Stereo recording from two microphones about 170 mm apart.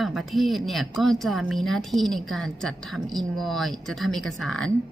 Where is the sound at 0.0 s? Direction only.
Centre (ahead or behind).